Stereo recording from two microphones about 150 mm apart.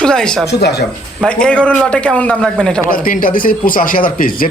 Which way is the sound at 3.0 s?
65° left (ahead or behind).